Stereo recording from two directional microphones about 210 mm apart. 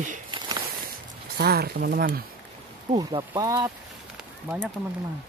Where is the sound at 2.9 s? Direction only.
15° right (ahead or behind).